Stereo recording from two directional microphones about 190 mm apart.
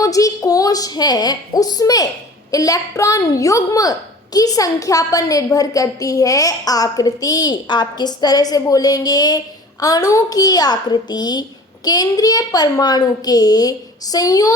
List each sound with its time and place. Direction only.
0.0 s a child's voice: 20° left (ahead or behind)